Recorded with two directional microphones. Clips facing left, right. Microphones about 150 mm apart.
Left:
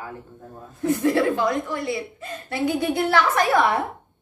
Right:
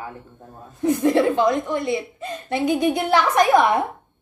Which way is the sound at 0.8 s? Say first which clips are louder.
Right 2 dB; 20° right (ahead or behind).